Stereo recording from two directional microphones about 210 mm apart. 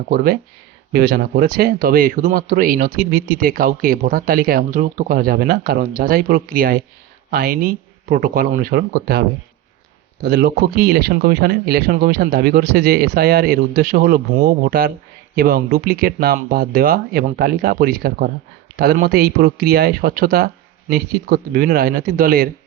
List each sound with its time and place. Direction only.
0.9 s speech: 45° right (ahead or behind)
10.2 s speech: 50° right (ahead or behind)